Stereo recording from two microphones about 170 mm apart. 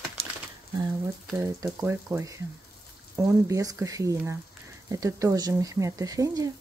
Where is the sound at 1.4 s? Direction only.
15° right (ahead or behind).